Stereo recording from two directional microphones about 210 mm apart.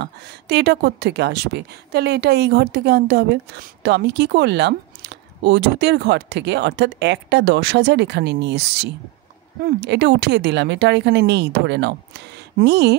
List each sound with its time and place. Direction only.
0.0 s speech: 55° right (ahead or behind)